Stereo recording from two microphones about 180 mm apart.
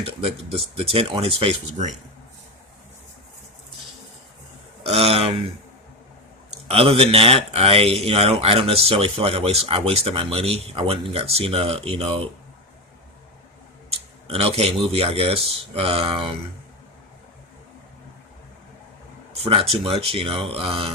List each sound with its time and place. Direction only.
0.0 s speech: 30° right (ahead or behind)
4.8 s a sound: 35° right (ahead or behind)
6.7 s speech: 35° right (ahead or behind)
14.3 s speech: 30° right (ahead or behind)
19.3 s a sound: 35° right (ahead or behind)
19.7 s speech: 30° right (ahead or behind)